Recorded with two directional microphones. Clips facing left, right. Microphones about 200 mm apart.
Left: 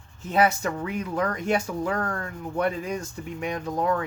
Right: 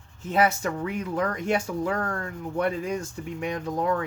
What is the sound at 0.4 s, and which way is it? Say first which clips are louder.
Speech: left 1 dB; 25° right (ahead or behind).